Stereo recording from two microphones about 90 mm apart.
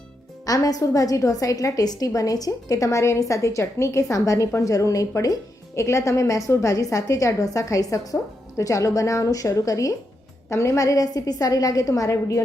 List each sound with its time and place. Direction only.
0.4 s a woman's voice: 40° left (ahead or behind)